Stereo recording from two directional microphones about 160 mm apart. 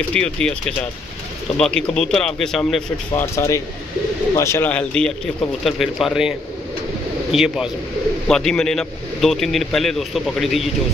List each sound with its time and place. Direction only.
0.1 s a man's voice: 5° left (ahead or behind)
3.2 s a man's voice: 20° left (ahead or behind); by 10.7 s centre (ahead or behind)